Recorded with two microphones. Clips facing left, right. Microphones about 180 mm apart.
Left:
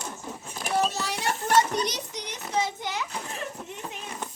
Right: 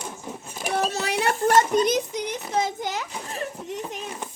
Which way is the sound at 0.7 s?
60° right (ahead or behind).